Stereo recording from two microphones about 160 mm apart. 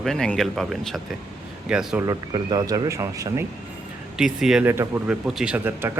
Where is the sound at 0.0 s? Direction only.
5° left (ahead or behind).